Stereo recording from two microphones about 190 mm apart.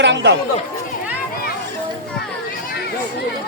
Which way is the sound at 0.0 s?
65° right (ahead or behind).